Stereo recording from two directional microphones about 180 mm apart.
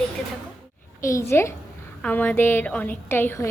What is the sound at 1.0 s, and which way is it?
A woman's voice, 15° left (ahead or behind).